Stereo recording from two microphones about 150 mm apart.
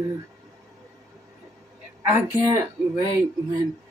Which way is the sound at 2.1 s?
15° right (ahead or behind).